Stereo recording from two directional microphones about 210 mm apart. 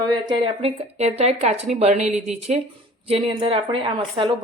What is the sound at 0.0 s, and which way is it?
A woman's voice, 20° right (ahead or behind).